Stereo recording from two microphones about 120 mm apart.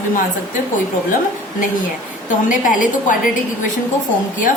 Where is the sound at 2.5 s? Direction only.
90° left.